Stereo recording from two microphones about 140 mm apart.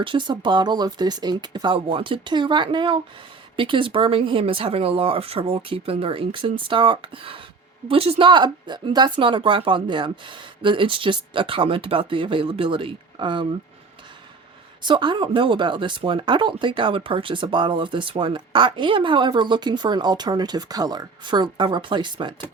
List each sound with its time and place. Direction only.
0.0 s speech: 35° right (ahead or behind)
14.8 s speech: 35° right (ahead or behind)